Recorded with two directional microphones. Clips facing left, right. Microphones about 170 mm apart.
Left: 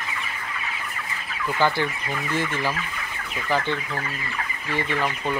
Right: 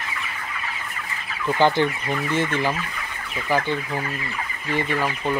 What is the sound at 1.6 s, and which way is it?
Speech, 20° right (ahead or behind).